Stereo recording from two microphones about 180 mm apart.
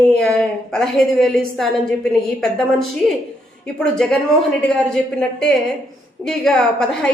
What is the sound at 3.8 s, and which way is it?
A woman's voice, 5° left (ahead or behind).